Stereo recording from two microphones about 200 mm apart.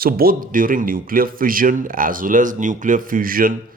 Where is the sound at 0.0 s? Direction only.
50° right (ahead or behind).